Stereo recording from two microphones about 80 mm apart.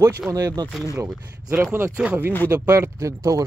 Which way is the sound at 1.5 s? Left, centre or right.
Right.